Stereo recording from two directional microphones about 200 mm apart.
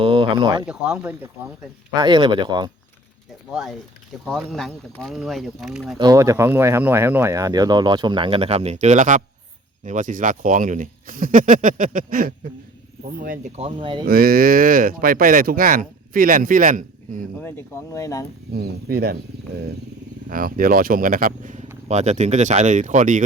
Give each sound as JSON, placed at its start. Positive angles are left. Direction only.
{"t": 0.0, "sound": "a sound", "side_deg": -25}
{"t": 0.7, "sound": "speech", "side_deg": -5}
{"t": 2.0, "sound": "speech", "side_deg": -25}
{"t": 3.5, "sound": "speech", "side_deg": 0}
{"t": 6.0, "sound": "speech", "side_deg": -20}
{"t": 13.6, "sound": "speech", "side_deg": -25}
{"t": 14.1, "sound": "speech", "side_deg": -45}
{"t": 17.4, "sound": "speech", "side_deg": 15}
{"t": 18.5, "sound": "speech", "side_deg": -50}
{"t": 20.3, "sound": "speech", "side_deg": -45}